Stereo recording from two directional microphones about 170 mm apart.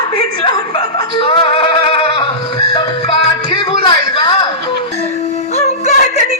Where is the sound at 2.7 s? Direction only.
30° left (ahead or behind).